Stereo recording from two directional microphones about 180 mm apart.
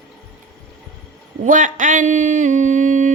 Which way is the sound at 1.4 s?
45° right (ahead or behind).